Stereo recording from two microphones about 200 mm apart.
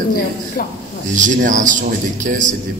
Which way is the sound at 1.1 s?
40° right (ahead or behind).